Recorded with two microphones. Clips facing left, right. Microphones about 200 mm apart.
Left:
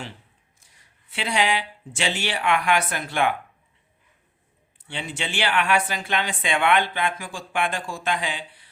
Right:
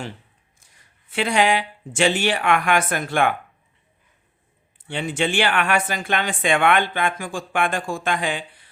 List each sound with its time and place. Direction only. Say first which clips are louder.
1.1 s speech: right 5 dB; 50° right (ahead or behind)
4.9 s speech: right 8 dB; 50° right (ahead or behind)